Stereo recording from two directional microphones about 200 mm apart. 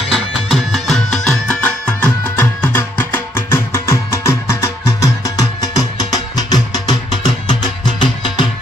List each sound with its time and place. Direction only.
0.1 s music: centre (ahead or behind); by 8.5 s 25° left (ahead or behind)